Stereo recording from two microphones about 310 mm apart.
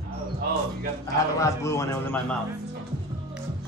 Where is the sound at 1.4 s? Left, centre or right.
Centre.